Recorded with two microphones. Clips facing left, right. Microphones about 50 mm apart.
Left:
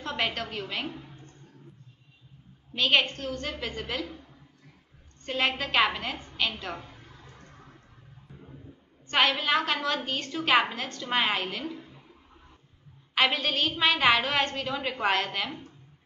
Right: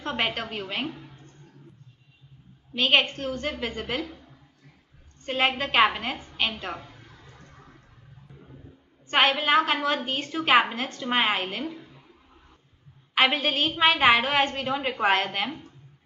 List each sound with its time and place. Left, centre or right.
0.0 s a woman's voice: right
2.8 s a woman's voice: centre
5.3 s a woman's voice: centre
9.1 s a woman's voice: centre
13.1 s a woman's voice: centre